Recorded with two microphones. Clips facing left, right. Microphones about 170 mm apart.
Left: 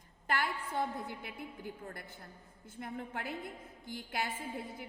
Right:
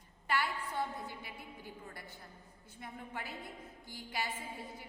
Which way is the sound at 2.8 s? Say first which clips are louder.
Left 4 dB; 55° left (ahead or behind).